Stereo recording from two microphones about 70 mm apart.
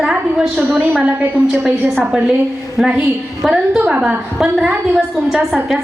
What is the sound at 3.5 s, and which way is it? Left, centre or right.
A woman's voice, centre.